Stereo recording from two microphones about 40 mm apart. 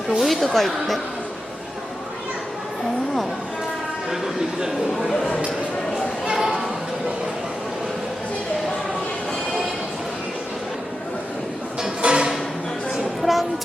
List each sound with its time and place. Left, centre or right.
0.2 s speech: centre
4.9 s speech: centre
5.1 s speech: left
6.2 s a sound: centre
12.0 s music: right
12.9 s a sound: centre